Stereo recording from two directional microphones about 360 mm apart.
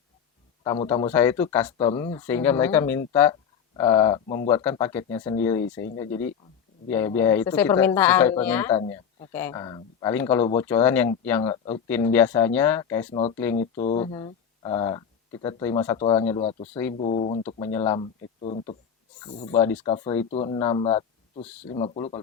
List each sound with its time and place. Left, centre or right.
0.6 s speech: centre
13.8 s speech: centre
19.5 s speech: centre
21.4 s speech: centre
21.8 s speech: centre